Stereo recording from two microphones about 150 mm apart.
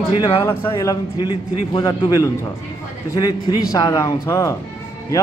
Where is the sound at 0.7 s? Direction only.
25° left (ahead or behind).